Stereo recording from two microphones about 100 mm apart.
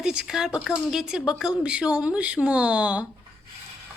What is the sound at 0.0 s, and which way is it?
Speech, 5° right (ahead or behind).